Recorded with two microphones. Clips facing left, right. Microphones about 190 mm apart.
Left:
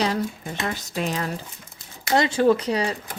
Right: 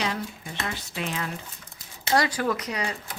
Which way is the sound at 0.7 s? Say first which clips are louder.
Left 6 dB; 40° left (ahead or behind).